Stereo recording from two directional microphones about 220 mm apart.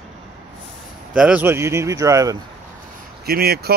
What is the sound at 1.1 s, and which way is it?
Speech, 5° right (ahead or behind).